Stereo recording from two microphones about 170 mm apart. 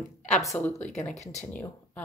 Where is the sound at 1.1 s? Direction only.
40° left (ahead or behind).